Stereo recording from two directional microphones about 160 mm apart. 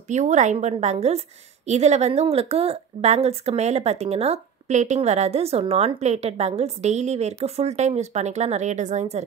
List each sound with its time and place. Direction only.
0.1 s a woman's voice: 50° right (ahead or behind)